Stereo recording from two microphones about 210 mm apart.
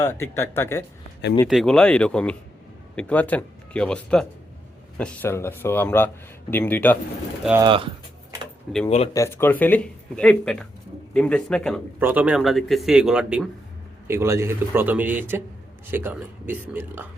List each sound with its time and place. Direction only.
0.0 s speech: 10° left (ahead or behind)
1.5 s a man's voice: centre (ahead or behind)
7.6 s typing: 25° right (ahead or behind)
8.7 s speech: 5° left (ahead or behind)
11.9 s a man's voice: 10° right (ahead or behind)